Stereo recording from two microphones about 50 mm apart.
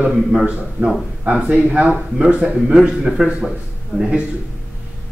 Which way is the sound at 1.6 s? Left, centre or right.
Right.